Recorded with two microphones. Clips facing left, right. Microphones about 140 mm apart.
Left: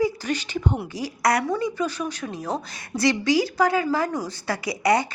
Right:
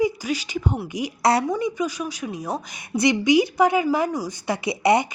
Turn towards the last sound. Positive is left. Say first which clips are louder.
# right 2 dB
turn(degrees=-20)  # may be behind; listen again after turning